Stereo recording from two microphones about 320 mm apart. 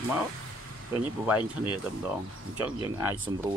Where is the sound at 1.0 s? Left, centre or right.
Centre.